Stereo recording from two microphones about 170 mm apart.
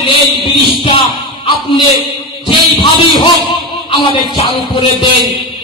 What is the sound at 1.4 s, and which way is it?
Speech, 30° left (ahead or behind).